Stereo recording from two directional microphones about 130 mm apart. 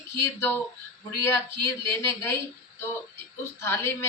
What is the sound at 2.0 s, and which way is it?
Speech, 20° left (ahead or behind).